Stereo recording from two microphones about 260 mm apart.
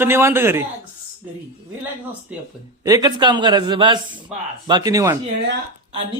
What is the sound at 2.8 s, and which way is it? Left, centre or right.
A man's voice, centre.